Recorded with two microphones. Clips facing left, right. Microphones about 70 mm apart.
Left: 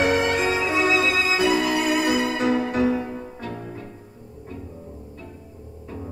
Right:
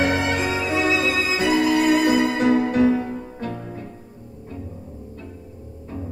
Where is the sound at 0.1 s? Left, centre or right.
Right.